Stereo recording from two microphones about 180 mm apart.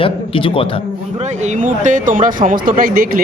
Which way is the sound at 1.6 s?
45° right (ahead or behind).